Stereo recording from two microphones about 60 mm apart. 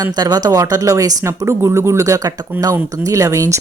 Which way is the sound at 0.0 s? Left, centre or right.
Right.